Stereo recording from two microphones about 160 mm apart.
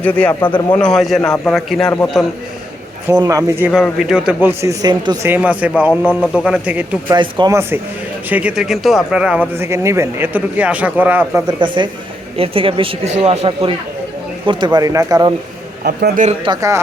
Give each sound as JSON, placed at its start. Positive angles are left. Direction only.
{"t": 0.0, "sound": "a man's voice", "side_deg": 10}
{"t": 3.1, "sound": "speech", "side_deg": -20}
{"t": 3.7, "sound": "a man's voice", "side_deg": 0}
{"t": 4.8, "sound": "speech", "side_deg": -25}
{"t": 5.3, "sound": "speech", "side_deg": -10}
{"t": 7.1, "sound": "speech", "side_deg": -25}
{"t": 8.3, "sound": "speech", "side_deg": -10}
{"t": 11.4, "sound": "speech", "side_deg": -30}
{"t": 15.8, "sound": "a man's voice", "side_deg": -75}
{"t": 16.4, "sound": "speech", "side_deg": -25}